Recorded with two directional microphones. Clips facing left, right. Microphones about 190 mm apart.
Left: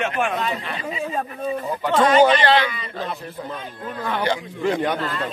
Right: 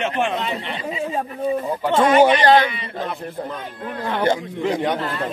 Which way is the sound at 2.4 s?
45° right (ahead or behind).